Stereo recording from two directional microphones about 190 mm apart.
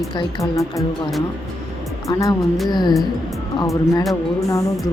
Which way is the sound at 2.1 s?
20° left (ahead or behind).